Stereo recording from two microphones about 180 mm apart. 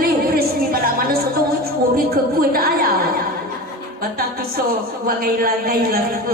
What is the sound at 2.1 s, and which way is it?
Speech, 55° right (ahead or behind).